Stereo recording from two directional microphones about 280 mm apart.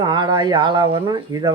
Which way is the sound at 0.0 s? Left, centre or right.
Centre.